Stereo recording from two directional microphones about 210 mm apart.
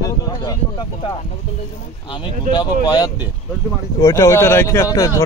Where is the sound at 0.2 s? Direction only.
15° left (ahead or behind).